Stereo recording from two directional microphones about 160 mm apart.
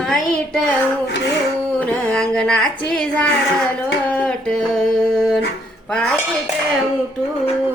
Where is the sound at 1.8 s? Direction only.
5° left (ahead or behind).